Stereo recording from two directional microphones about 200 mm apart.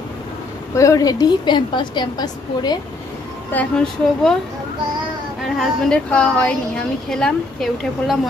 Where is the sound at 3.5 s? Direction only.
5° left (ahead or behind).